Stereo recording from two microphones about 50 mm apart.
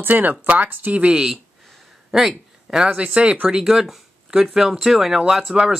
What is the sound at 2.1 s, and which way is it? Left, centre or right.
Speech, centre.